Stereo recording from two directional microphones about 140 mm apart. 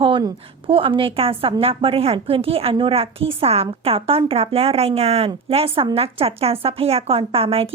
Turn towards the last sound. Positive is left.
turn(degrees=-45)  # may be behind; listen again after turning